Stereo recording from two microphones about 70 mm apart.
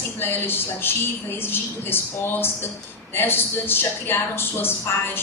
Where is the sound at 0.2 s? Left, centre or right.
Left.